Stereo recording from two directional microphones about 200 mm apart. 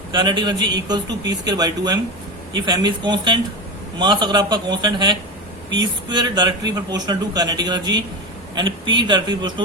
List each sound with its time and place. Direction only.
0.1 s a man's voice: 20° right (ahead or behind)